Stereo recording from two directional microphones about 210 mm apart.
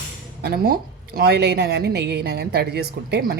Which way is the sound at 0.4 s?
50° right (ahead or behind).